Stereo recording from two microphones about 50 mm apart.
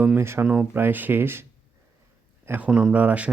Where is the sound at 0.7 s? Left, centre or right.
Right.